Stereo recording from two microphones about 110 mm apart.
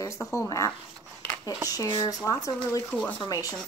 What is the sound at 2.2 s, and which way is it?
Speech, 35° left (ahead or behind).